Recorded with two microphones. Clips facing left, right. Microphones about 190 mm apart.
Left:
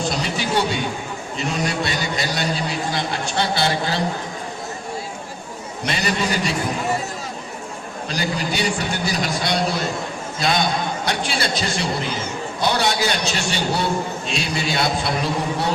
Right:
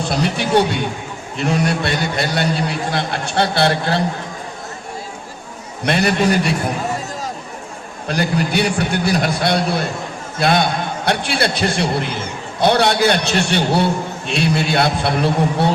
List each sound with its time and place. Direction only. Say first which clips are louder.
0.1 s a man's voice: right 6 dB; 60° right (ahead or behind)
5.8 s a man's voice: right 7 dB; 55° right (ahead or behind)
8.0 s a man's voice: right 6 dB; 60° right (ahead or behind)